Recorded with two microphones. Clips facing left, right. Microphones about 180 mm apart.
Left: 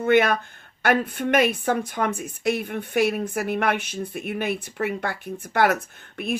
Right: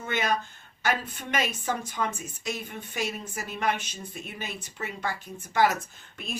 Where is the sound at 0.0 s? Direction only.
60° left (ahead or behind).